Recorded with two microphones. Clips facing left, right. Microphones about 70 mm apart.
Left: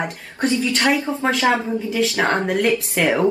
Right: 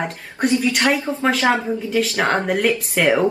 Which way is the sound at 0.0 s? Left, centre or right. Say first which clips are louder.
Right 1 dB; centre.